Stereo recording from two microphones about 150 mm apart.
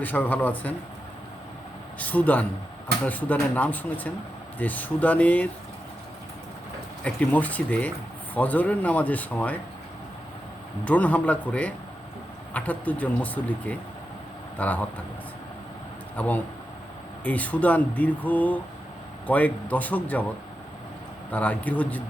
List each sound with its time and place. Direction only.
0.0 s speech: 10° left (ahead or behind)
2.0 s speech: 10° left (ahead or behind)
7.0 s speech: 10° left (ahead or behind)
10.8 s speech: 10° left (ahead or behind)
16.1 s speech: 10° left (ahead or behind)
21.3 s speech: 10° left (ahead or behind)